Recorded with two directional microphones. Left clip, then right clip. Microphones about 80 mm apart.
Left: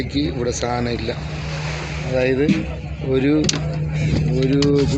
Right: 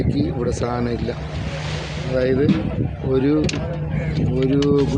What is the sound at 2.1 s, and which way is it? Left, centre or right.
Speech, right.